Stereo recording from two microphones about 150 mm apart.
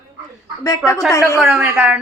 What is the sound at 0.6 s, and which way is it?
Speech, 25° left (ahead or behind).